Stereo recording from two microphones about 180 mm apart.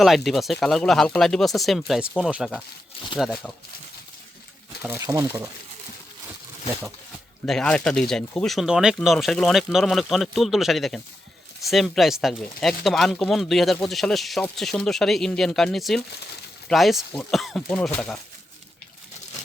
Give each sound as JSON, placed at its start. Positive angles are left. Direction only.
{"t": 0.0, "sound": "speech", "side_deg": 0}
{"t": 4.9, "sound": "speech", "side_deg": -15}
{"t": 7.4, "sound": "speech", "side_deg": 5}